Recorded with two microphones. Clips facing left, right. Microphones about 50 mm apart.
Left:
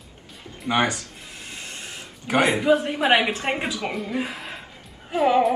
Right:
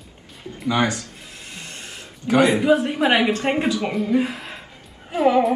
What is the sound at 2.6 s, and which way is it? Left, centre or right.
Speech, centre.